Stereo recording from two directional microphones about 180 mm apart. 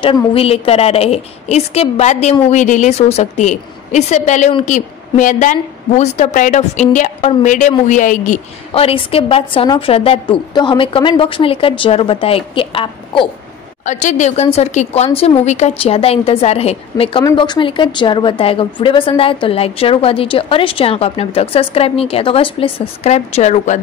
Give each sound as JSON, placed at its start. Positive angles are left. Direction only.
{"t": 0.0, "sound": "a woman's voice", "side_deg": 30}
{"t": 13.8, "sound": "a woman's voice", "side_deg": 40}